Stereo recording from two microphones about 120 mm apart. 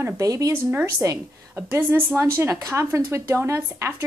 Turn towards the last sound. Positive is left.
turn(degrees=-25)  # may be behind; listen again after turning